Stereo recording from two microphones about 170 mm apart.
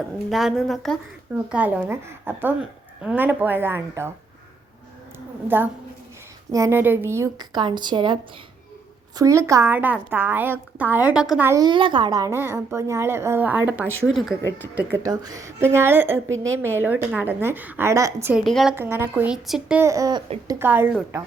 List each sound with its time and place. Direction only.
0.3 s a woman's voice: centre (ahead or behind)
1.5 s a woman's voice: 10° right (ahead or behind)
6.5 s a woman's voice: 15° right (ahead or behind)
9.1 s a woman's voice: 20° right (ahead or behind)
11.6 s a woman's voice: 30° right (ahead or behind); by 14.1 s 10° right (ahead or behind)
14.1 s a woman's voice: centre (ahead or behind)
15.0 s a woman's voice: 20° right (ahead or behind)
18.4 s a woman's voice: centre (ahead or behind)
18.7 s a woman's voice: 15° right (ahead or behind)
19.8 s a woman's voice: 20° right (ahead or behind)